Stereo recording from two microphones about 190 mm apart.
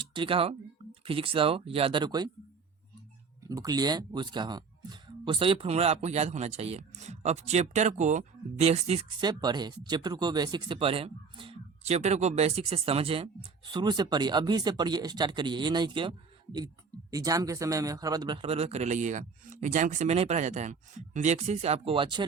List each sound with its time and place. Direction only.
0.1 s speech: 25° right (ahead or behind)
3.5 s a man's voice: 20° right (ahead or behind)